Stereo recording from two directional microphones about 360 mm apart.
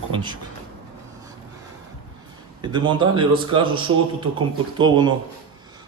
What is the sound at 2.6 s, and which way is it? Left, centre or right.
Speech, centre.